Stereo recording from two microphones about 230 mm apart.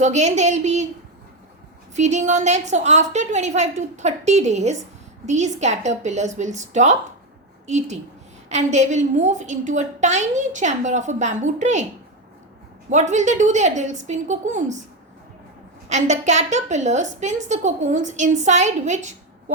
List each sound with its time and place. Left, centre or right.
0.0 s a woman's voice: right
2.0 s a woman's voice: right
12.9 s a woman's voice: right
15.9 s a woman's voice: right